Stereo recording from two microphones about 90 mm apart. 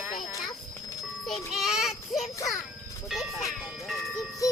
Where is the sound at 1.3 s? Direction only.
5° right (ahead or behind).